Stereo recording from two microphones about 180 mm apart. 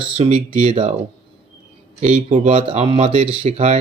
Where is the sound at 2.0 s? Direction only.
40° right (ahead or behind).